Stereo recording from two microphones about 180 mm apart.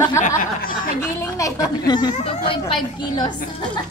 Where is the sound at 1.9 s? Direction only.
25° left (ahead or behind).